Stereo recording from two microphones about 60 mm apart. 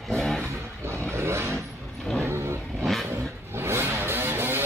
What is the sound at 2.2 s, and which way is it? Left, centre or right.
Vehicle, right.